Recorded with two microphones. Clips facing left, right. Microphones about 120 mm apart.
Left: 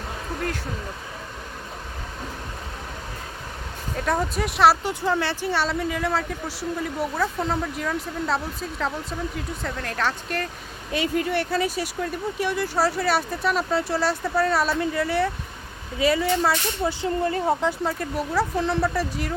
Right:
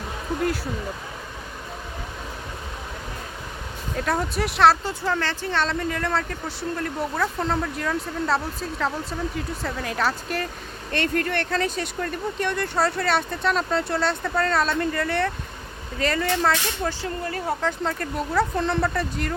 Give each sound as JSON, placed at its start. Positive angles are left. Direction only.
{"t": 3.9, "sound": "speech", "side_deg": 0}
{"t": 17.0, "sound": "speech", "side_deg": 25}
{"t": 17.7, "sound": "speech", "side_deg": 5}